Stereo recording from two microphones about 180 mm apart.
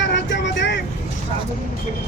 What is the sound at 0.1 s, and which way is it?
Vehicle, 70° left (ahead or behind).